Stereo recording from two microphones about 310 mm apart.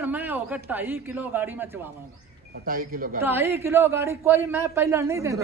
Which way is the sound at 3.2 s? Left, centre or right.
Centre.